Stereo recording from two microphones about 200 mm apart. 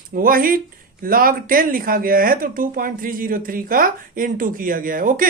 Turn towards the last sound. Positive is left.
turn(degrees=-45)  # may be behind; listen again after turning